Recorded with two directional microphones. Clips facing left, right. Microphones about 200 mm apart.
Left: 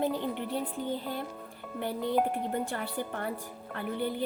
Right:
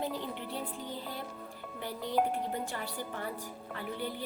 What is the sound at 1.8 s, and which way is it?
Speech, 55° left (ahead or behind).